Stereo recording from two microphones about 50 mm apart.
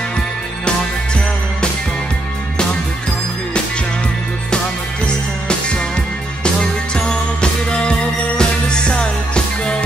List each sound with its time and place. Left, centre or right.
6.4 s music: centre
8.4 s music: centre